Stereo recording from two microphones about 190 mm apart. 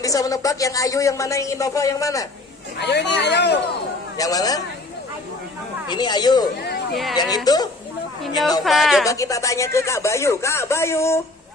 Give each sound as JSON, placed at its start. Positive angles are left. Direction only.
{"t": 0.0, "sound": "speech", "side_deg": 20}
{"t": 2.7, "sound": "speech", "side_deg": 60}
{"t": 4.2, "sound": "speech", "side_deg": 20}
{"t": 5.9, "sound": "speech", "side_deg": 25}
{"t": 6.9, "sound": "speech", "side_deg": 0}
{"t": 7.2, "sound": "speech", "side_deg": 20}
{"t": 8.6, "sound": "speech", "side_deg": 0}
{"t": 9.0, "sound": "speech", "side_deg": 15}